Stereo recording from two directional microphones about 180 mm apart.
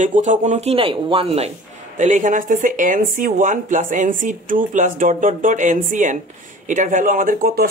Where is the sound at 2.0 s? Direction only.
45° right (ahead or behind).